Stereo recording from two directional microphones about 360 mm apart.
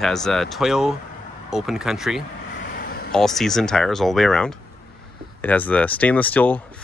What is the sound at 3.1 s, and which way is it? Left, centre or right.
Speech, centre.